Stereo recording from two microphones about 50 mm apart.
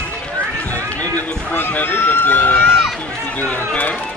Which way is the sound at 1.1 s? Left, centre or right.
Left.